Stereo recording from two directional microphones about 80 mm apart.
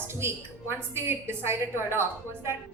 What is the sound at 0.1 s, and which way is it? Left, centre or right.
A woman's voice, right.